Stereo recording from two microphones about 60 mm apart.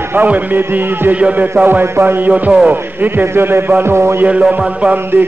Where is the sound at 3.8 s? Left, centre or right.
Right.